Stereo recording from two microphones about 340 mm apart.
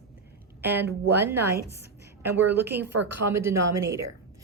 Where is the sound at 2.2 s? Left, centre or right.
Centre.